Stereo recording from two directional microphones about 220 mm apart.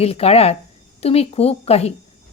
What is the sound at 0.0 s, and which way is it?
A woman's voice, 25° left (ahead or behind).